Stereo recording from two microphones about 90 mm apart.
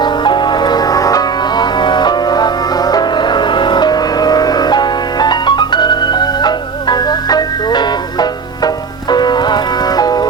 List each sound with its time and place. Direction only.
0.0 s music: 60° left (ahead or behind)